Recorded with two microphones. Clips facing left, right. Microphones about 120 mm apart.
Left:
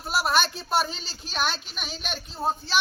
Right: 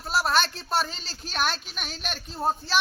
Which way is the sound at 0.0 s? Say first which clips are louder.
Even; centre (ahead or behind).